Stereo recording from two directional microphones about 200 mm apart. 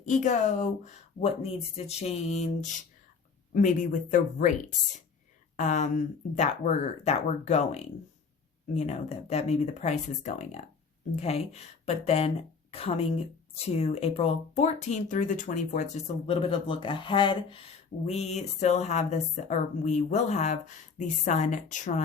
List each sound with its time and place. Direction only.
0.0 s a woman's voice: 40° left (ahead or behind)
5.5 s a woman's voice: 40° left (ahead or behind)